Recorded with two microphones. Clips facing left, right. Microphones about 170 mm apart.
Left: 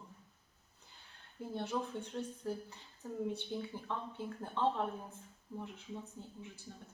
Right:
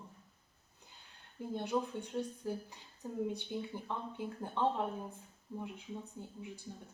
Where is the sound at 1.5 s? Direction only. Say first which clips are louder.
Right 2 dB; 15° right (ahead or behind).